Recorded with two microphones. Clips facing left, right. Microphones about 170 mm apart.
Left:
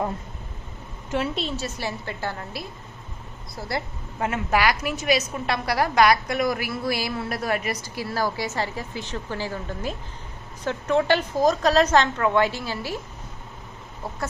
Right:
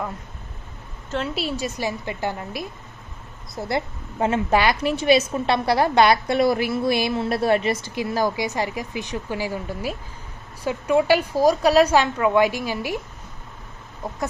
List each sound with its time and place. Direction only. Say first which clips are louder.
1.3 s a woman's voice: right 3 dB; 10° right (ahead or behind)
14.0 s chicken: right 3 dB; 15° right (ahead or behind)